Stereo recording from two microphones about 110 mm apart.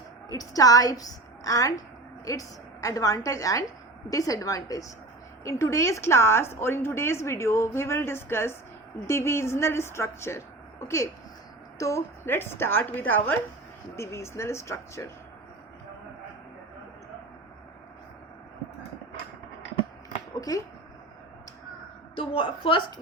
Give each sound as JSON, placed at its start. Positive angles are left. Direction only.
{"t": 0.3, "sound": "a woman's voice", "side_deg": 35}
{"t": 13.9, "sound": "a woman's voice", "side_deg": 25}
{"t": 20.5, "sound": "a woman's voice", "side_deg": 35}
{"t": 22.1, "sound": "a woman's voice", "side_deg": 50}